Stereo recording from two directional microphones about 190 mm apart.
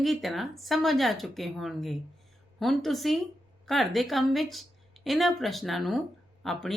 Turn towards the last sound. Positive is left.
turn(degrees=0)  # may be behind; listen again after turning